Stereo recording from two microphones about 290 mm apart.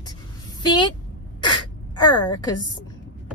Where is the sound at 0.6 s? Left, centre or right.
Centre.